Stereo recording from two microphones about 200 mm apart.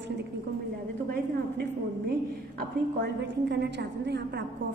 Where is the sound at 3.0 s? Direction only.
60° right (ahead or behind).